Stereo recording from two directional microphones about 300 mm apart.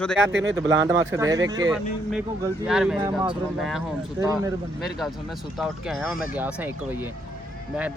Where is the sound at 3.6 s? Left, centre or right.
Centre.